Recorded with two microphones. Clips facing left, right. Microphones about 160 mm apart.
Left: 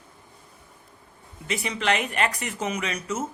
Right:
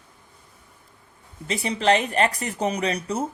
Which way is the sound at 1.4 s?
30° right (ahead or behind).